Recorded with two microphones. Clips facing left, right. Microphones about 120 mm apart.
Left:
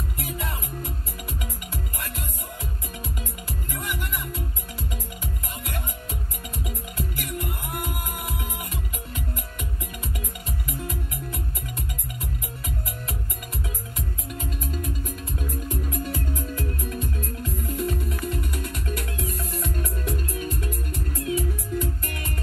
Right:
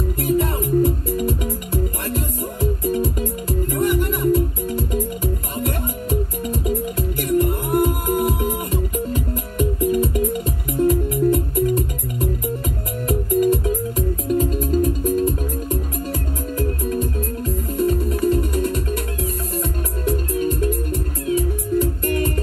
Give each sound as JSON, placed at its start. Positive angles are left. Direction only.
{"t": 0.2, "sound": "music", "side_deg": -35}
{"t": 13.4, "sound": "music", "side_deg": -40}